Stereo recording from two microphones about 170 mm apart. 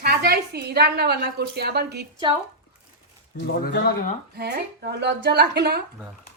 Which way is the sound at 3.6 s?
70° left (ahead or behind).